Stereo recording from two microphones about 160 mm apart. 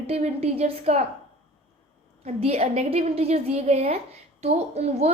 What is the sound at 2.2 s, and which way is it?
A woman's voice, 40° right (ahead or behind).